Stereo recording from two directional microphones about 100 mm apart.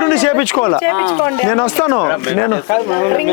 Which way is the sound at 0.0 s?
20° left (ahead or behind).